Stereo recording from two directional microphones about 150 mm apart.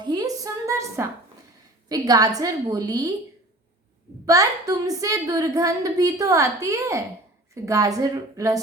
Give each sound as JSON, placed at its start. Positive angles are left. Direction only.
{"t": 0.0, "sound": "a sound", "side_deg": -25}
{"t": 1.9, "sound": "a woman's voice", "side_deg": -25}
{"t": 4.3, "sound": "a woman's voice", "side_deg": -20}